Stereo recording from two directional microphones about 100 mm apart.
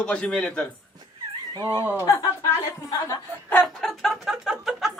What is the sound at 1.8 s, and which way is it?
Speech, 20° right (ahead or behind).